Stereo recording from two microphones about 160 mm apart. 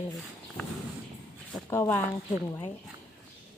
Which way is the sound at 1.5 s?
15° left (ahead or behind).